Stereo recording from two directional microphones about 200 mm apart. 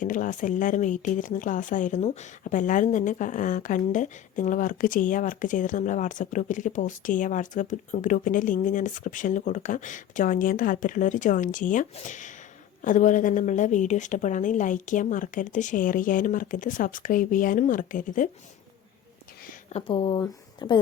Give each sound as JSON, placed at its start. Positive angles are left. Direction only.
{"t": 0.0, "sound": "speech", "side_deg": 40}
{"t": 19.7, "sound": "speech", "side_deg": 25}